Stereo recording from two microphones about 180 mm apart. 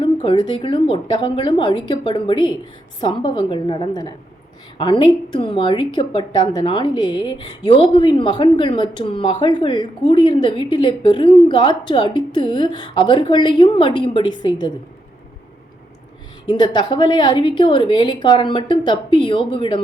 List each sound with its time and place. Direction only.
0.0 s a woman's voice: 25° left (ahead or behind)
16.5 s a woman's voice: 25° left (ahead or behind)